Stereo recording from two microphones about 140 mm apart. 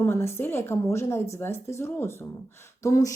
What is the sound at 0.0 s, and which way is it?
Speech, 20° left (ahead or behind).